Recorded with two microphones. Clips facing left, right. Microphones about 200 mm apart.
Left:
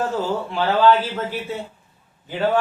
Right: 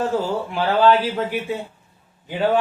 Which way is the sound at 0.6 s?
15° right (ahead or behind).